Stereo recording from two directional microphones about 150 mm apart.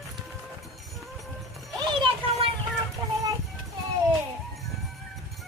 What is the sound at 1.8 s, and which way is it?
Music, 35° right (ahead or behind).